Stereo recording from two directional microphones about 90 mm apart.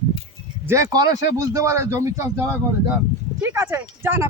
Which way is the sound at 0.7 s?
30° right (ahead or behind).